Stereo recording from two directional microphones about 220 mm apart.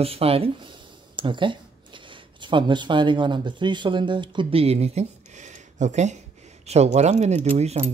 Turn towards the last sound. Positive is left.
turn(degrees=-30)  # may be behind; listen again after turning